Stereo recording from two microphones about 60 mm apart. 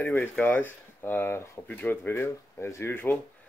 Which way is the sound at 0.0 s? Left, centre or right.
Left.